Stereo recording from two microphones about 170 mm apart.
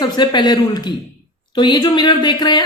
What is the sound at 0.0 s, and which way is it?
Speech, 25° left (ahead or behind).